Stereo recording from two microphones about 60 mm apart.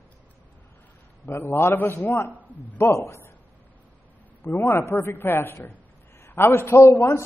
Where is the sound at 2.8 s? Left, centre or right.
Left.